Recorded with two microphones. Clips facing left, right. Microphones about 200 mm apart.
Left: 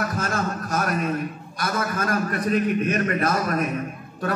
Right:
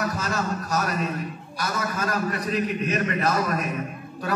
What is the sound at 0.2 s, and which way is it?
A man's voice, 50° left (ahead or behind).